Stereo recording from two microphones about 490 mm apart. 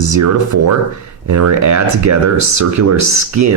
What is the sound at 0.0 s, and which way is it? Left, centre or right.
Speech, right.